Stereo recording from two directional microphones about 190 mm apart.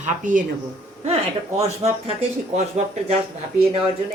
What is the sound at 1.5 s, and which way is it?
Speech, 35° right (ahead or behind).